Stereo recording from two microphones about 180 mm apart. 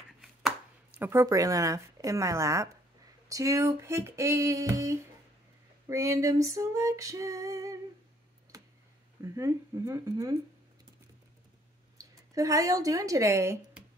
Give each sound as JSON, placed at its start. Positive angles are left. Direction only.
{"t": 0.9, "sound": "female singing", "side_deg": -15}
{"t": 8.5, "sound": "tick", "side_deg": -20}
{"t": 9.2, "sound": "female singing", "side_deg": -15}
{"t": 12.0, "sound": "speech", "side_deg": -20}